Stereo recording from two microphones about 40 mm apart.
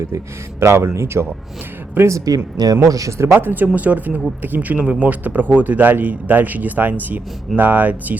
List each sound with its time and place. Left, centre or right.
0.8 s a man's voice: right